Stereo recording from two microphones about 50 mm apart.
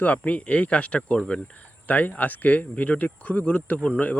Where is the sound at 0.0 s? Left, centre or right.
Left.